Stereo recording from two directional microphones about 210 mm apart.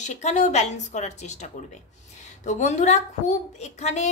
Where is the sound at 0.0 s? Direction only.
35° left (ahead or behind).